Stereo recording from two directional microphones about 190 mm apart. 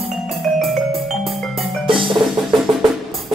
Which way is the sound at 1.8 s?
25° right (ahead or behind).